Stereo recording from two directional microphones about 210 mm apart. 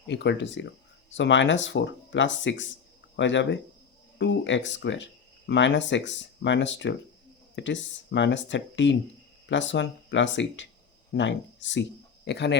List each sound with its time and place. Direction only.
0.1 s speech: 55° left (ahead or behind)